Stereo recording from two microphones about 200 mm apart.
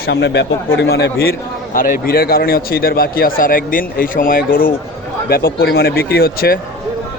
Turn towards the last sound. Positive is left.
turn(degrees=50)  # may be behind; listen again after turning